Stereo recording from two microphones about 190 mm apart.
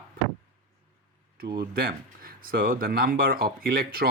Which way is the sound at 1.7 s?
50° right (ahead or behind).